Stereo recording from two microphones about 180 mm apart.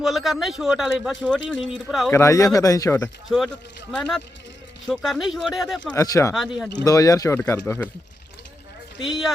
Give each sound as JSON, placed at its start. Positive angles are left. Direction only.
{"t": 0.0, "sound": "speech", "side_deg": 0}
{"t": 2.1, "sound": "speech", "side_deg": 15}
{"t": 3.2, "sound": "speech", "side_deg": 0}
{"t": 5.9, "sound": "speech", "side_deg": 15}
{"t": 6.3, "sound": "speech", "side_deg": 0}
{"t": 6.8, "sound": "speech", "side_deg": 20}